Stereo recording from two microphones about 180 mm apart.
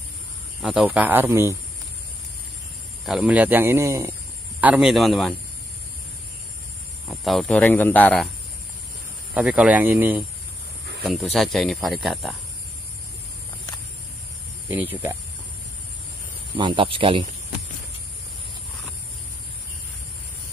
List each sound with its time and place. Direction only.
0.6 s speech: centre (ahead or behind)
3.1 s speech: 5° right (ahead or behind)
7.1 s speech: centre (ahead or behind)
9.3 s speech: 5° right (ahead or behind)
14.7 s speech: 10° right (ahead or behind)
16.5 s speech: 25° right (ahead or behind)